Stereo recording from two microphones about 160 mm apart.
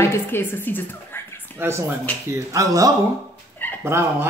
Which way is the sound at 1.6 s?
15° right (ahead or behind).